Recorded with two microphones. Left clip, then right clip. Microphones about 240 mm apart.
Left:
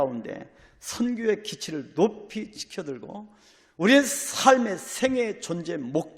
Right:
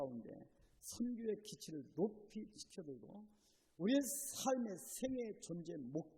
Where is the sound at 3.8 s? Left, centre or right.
Centre.